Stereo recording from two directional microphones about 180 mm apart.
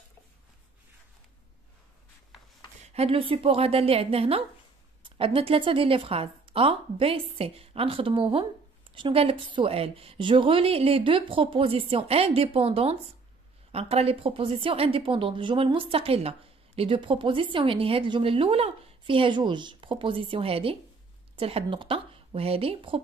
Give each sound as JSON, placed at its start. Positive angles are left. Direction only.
{"t": 2.9, "sound": "a woman's voice", "side_deg": -35}